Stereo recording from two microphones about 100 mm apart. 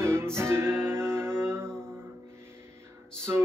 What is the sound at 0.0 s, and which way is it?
Music, 25° right (ahead or behind).